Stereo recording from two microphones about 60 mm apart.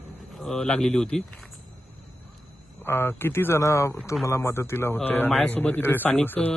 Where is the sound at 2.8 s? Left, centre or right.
Left.